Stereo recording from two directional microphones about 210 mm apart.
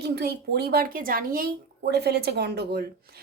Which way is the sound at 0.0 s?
50° right (ahead or behind).